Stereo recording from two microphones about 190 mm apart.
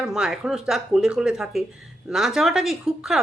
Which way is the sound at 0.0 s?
5° right (ahead or behind).